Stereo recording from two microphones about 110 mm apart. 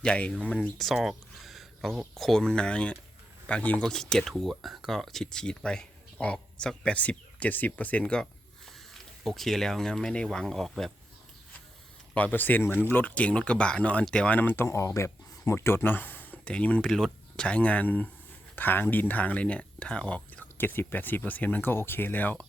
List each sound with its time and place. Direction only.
0.0 s speech: 10° left (ahead or behind)
12.1 s speech: 15° left (ahead or behind)